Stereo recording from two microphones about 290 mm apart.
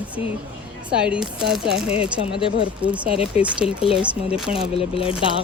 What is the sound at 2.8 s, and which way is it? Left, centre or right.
Speech, centre.